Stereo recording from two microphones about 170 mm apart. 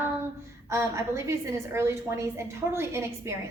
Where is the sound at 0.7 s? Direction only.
15° right (ahead or behind).